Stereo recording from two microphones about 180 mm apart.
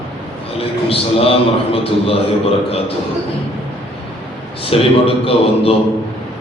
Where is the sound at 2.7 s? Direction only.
35° left (ahead or behind).